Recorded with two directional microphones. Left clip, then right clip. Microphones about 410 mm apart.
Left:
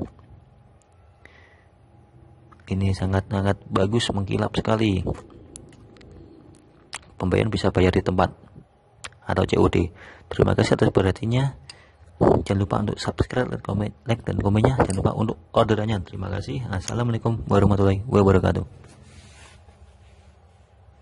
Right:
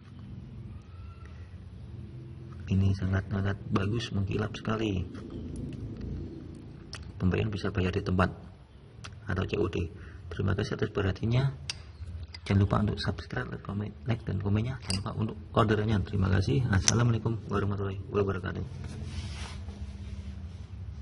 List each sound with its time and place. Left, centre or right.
3.0 s speech: centre
6.9 s a sound: centre
7.5 s speech: centre